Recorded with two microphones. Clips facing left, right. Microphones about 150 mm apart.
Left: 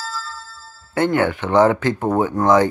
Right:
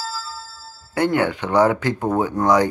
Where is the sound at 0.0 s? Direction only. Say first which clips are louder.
Even; 10° right (ahead or behind).